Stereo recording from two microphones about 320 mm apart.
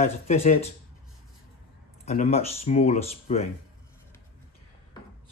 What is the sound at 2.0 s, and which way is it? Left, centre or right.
Speech, centre.